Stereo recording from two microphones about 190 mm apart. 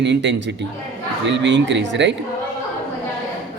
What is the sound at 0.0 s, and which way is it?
A man's voice, 70° right (ahead or behind).